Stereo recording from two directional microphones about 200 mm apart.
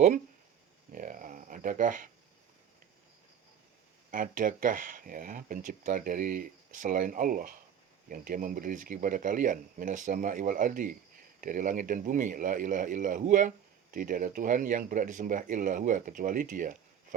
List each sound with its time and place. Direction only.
0.9 s speech: 40° right (ahead or behind)
4.1 s speech: 45° right (ahead or behind)